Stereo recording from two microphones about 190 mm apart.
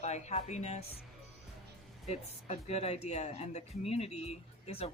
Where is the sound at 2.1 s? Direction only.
35° left (ahead or behind).